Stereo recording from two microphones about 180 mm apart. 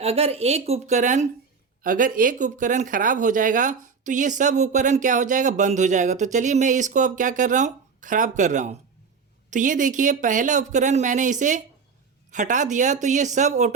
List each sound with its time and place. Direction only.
0.0 s a woman's voice: 35° right (ahead or behind)